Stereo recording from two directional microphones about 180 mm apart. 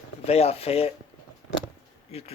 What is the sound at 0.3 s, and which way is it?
Speech, 35° left (ahead or behind).